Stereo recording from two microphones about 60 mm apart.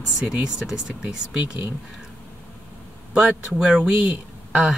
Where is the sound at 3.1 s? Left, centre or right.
Centre.